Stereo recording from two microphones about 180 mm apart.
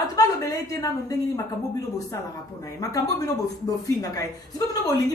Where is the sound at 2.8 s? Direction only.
20° left (ahead or behind).